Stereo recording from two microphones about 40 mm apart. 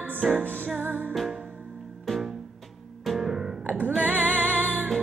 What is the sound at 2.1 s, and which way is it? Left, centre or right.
Music, centre.